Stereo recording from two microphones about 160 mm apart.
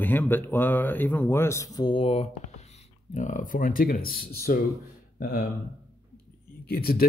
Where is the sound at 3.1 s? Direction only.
50° left (ahead or behind).